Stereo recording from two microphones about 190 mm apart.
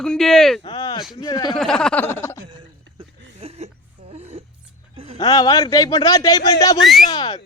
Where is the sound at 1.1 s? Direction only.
20° left (ahead or behind).